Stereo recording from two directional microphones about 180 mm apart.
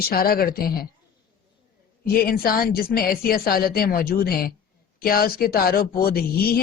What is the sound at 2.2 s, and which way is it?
A woman's voice, 55° left (ahead or behind).